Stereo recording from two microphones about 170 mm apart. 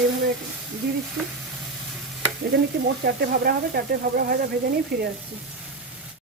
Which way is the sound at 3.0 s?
70° right (ahead or behind).